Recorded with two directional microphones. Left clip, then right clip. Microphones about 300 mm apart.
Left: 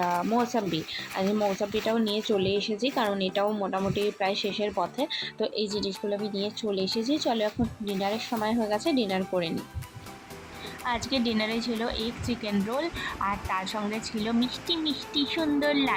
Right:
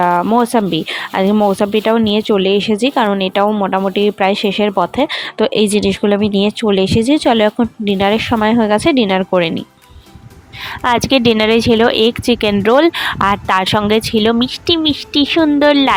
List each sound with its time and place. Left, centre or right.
0.0 s speech: right
5.7 s speech: right
6.0 s speech: right
11.3 s speech: right
14.4 s speech: right
15.3 s speech: right